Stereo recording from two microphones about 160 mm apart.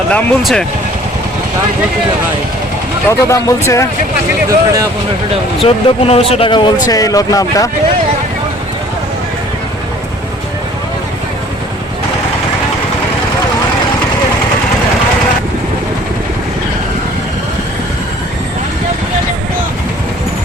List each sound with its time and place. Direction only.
0.1 s speech: 5° left (ahead or behind)
3.1 s speech: 20° left (ahead or behind)
4.4 s speech: 20° right (ahead or behind)
5.6 s speech: 40° left (ahead or behind)
6.8 s speech: 20° left (ahead or behind)